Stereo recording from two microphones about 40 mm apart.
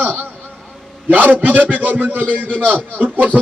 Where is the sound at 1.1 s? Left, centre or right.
Right.